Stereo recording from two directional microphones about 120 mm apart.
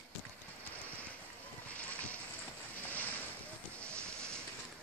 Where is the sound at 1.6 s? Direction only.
10° left (ahead or behind).